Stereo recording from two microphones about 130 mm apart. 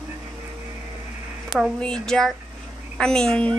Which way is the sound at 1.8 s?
5° left (ahead or behind).